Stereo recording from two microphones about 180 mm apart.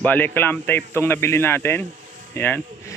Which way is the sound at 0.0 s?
10° left (ahead or behind).